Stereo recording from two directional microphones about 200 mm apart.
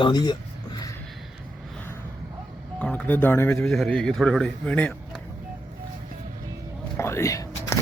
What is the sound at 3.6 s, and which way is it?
A man's voice, centre (ahead or behind).